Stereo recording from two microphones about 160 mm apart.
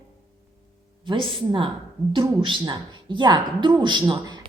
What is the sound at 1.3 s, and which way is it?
A woman's voice, 35° right (ahead or behind).